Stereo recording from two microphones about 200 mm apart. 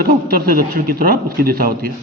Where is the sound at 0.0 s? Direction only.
50° right (ahead or behind).